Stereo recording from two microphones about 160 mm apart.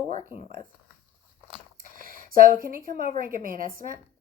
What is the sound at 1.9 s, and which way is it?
A woman's voice, 65° right (ahead or behind).